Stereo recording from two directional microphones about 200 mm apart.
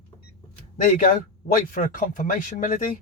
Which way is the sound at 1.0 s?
45° left (ahead or behind).